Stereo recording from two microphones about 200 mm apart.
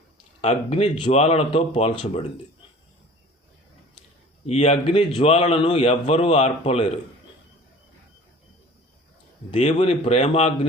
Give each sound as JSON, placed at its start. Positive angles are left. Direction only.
{"t": 0.4, "sound": "speech", "side_deg": 30}
{"t": 4.4, "sound": "a man's voice", "side_deg": 35}
{"t": 9.5, "sound": "a man's voice", "side_deg": 30}